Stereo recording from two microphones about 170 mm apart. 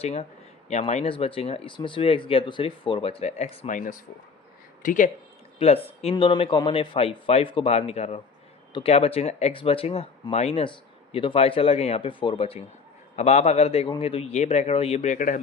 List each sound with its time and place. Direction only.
0.0 s speech: 40° left (ahead or behind)
3.7 s speech: 50° left (ahead or behind)
5.5 s speech: 35° left (ahead or behind)